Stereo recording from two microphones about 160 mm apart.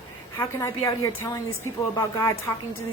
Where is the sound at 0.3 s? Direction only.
15° left (ahead or behind).